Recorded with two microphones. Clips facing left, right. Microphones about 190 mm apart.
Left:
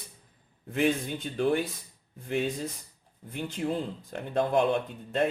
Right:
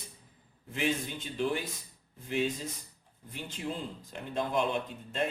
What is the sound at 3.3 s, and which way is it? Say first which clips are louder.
Speech: left 7 dB; 55° left (ahead or behind).